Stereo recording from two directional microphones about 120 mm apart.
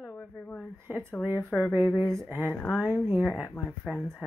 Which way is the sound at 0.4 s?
15° left (ahead or behind).